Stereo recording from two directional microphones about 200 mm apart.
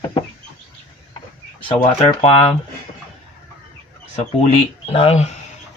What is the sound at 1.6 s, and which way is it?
Speech, 25° left (ahead or behind).